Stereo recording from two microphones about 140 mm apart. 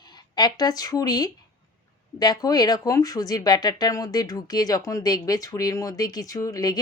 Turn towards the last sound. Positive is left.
turn(degrees=25)  # may be behind; listen again after turning